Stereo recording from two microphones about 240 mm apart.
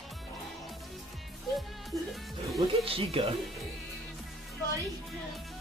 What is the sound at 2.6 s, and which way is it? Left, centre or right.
Music, right.